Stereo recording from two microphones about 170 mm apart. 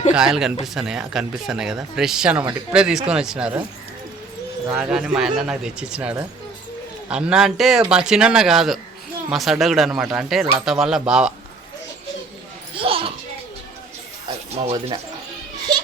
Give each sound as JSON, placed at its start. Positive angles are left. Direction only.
{"t": 0.1, "sound": "speech", "side_deg": -5}
{"t": 4.7, "sound": "speech", "side_deg": -5}
{"t": 12.7, "sound": "children playing", "side_deg": -30}
{"t": 14.5, "sound": "speech", "side_deg": -35}